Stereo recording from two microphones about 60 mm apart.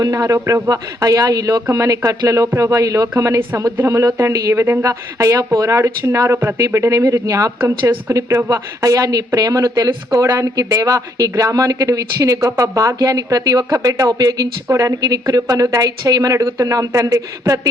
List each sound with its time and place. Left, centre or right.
0.0 s speech: right
0.4 s speech: right
0.7 s a woman's voice: right
1.7 s speech: right
2.0 s speech: right
2.6 s speech: right
4.5 s speech: right
4.8 s speech: right
7.6 s speech: right
8.1 s speech: right
8.8 s a woman's voice: right